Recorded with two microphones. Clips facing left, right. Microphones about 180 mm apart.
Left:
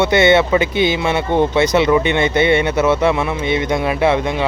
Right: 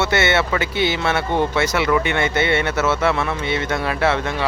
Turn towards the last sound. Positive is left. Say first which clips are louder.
# left 4 dB
turn(degrees=15)  # may be behind; listen again after turning